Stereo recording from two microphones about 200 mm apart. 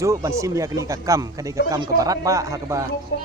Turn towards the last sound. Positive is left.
turn(degrees=60)  # may be behind; listen again after turning